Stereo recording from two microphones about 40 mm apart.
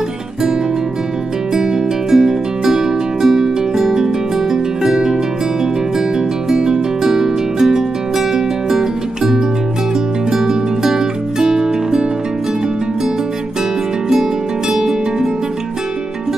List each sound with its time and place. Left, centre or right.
1.5 s music: centre
6.5 s music: centre
14.7 s music: centre